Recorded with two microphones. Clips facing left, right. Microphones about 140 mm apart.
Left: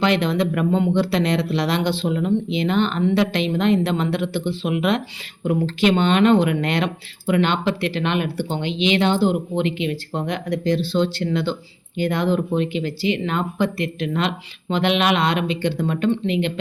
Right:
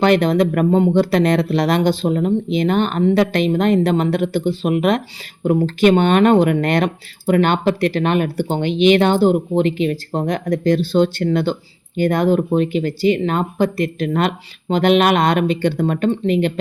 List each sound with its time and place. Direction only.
0.0 s speech: 45° right (ahead or behind)